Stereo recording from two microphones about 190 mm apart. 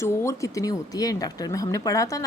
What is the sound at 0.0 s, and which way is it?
Speech, 15° left (ahead or behind).